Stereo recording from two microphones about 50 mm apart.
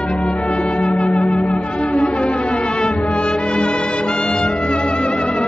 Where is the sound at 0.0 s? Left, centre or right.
Left.